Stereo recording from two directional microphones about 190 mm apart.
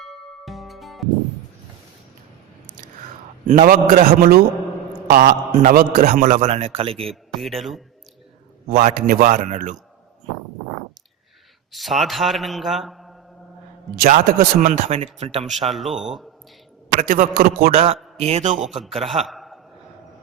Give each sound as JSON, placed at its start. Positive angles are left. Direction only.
{"t": 0.0, "sound": "music", "side_deg": 0}
{"t": 3.4, "sound": "a man's voice", "side_deg": -45}
{"t": 7.1, "sound": "a man's voice", "side_deg": 0}
{"t": 8.7, "sound": "a man's voice", "side_deg": -45}
{"t": 11.7, "sound": "a man's voice", "side_deg": 0}
{"t": 13.9, "sound": "a man's voice", "side_deg": -50}
{"t": 15.6, "sound": "a man's voice", "side_deg": 0}
{"t": 17.0, "sound": "a man's voice", "side_deg": -45}
{"t": 17.7, "sound": "a man's voice", "side_deg": -35}
{"t": 19.0, "sound": "a man's voice", "side_deg": 0}